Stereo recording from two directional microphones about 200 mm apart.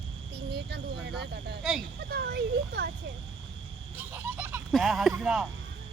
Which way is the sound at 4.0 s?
10° right (ahead or behind).